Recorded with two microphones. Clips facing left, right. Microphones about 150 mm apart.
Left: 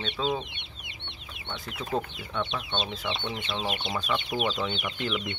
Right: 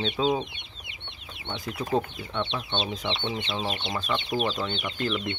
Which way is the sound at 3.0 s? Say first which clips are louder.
Right 3 dB; 25° right (ahead or behind).